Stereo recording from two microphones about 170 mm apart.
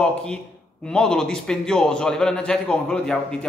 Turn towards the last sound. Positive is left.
turn(degrees=5)  # may be behind; listen again after turning